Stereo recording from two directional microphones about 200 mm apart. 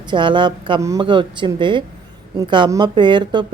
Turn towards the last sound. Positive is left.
turn(degrees=-20)  # may be behind; listen again after turning